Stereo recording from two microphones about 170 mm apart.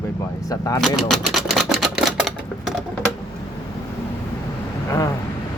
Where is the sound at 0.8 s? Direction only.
Centre (ahead or behind).